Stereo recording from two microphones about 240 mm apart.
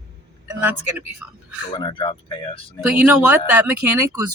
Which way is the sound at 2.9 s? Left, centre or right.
Centre.